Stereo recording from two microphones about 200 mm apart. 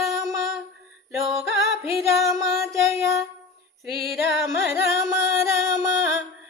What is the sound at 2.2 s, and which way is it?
Music, 15° right (ahead or behind).